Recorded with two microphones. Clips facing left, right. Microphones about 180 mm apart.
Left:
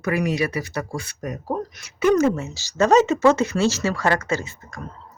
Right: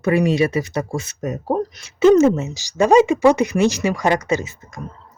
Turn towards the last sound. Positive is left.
turn(degrees=-20)  # may be behind; listen again after turning